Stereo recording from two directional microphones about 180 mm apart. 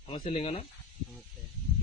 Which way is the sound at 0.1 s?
30° left (ahead or behind).